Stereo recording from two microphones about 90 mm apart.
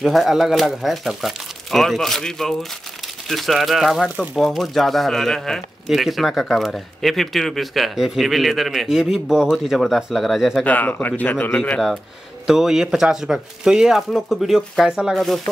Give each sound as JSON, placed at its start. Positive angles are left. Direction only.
{"t": 0.0, "sound": "speech", "side_deg": 0}
{"t": 10.6, "sound": "speech", "side_deg": 20}
{"t": 12.4, "sound": "speech", "side_deg": -5}